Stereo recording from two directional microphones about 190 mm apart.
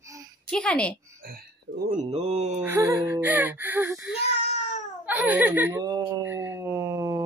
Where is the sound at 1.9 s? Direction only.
35° right (ahead or behind).